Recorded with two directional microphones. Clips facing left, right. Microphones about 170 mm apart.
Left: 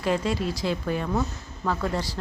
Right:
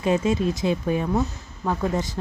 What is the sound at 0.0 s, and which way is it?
A woman's voice, 20° right (ahead or behind).